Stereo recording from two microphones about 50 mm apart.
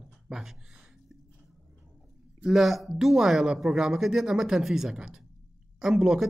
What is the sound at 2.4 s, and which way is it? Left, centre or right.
Speech, centre.